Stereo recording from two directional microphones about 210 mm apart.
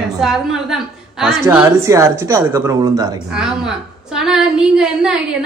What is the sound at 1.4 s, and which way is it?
Speech, 15° right (ahead or behind).